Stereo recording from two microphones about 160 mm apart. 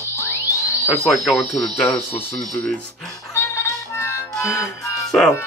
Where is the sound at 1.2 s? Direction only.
Centre (ahead or behind); by 5.1 s 20° left (ahead or behind).